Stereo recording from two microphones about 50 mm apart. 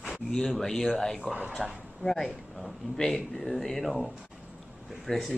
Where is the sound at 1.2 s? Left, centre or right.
Right.